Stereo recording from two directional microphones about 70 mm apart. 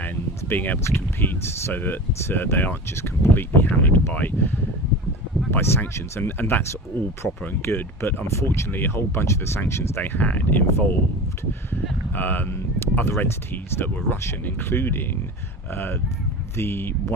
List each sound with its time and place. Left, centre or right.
0.4 s speech: left
10.0 s speech: left
11.7 s a sound: left
12.5 s speech: left